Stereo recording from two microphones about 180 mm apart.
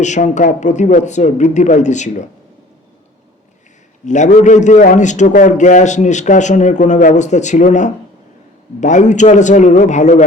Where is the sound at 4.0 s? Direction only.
40° left (ahead or behind).